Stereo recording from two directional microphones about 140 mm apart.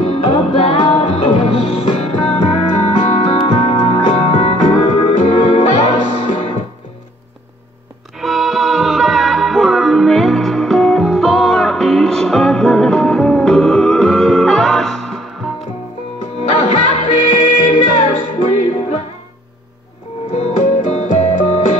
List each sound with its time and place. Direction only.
0.0 s music: 40° left (ahead or behind)
5.6 s music: 60° left (ahead or behind)
6.3 s music: 40° left (ahead or behind)
8.2 s music: centre (ahead or behind)
16.9 s music: 40° left (ahead or behind)
17.3 s music: 60° left (ahead or behind)
17.6 s music: 40° left (ahead or behind)
20.3 s music: 50° left (ahead or behind)